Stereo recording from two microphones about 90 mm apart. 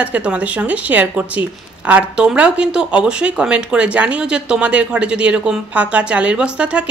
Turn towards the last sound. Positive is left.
turn(degrees=-15)  # may be behind; listen again after turning